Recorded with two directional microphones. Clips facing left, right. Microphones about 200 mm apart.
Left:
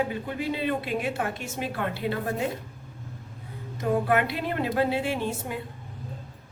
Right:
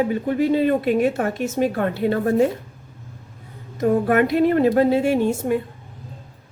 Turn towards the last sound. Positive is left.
turn(degrees=-45)  # may be behind; listen again after turning